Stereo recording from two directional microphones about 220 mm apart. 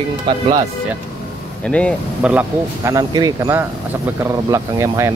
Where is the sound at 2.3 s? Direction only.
10° right (ahead or behind).